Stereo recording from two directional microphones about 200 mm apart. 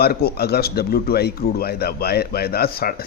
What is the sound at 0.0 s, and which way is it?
Speech, 50° left (ahead or behind).